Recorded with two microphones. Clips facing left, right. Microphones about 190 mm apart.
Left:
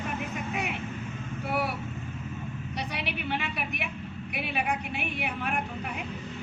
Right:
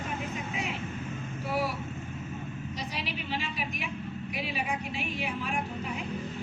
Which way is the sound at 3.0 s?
65° left (ahead or behind).